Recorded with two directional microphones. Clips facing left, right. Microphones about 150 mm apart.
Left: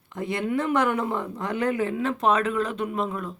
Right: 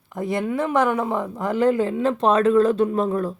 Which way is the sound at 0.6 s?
20° right (ahead or behind).